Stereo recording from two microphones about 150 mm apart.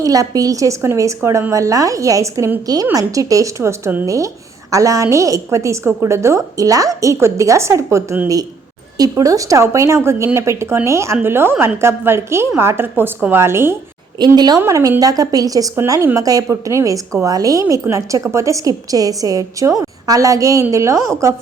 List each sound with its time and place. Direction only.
0.0 s a woman's voice: 25° right (ahead or behind)
14.2 s a woman's voice: 30° right (ahead or behind)